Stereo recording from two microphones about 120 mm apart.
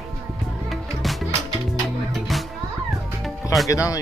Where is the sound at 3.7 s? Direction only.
25° left (ahead or behind).